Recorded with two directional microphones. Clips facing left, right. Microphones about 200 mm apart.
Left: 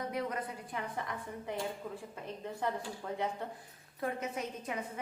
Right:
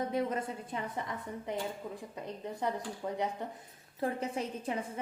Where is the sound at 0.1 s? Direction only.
25° right (ahead or behind).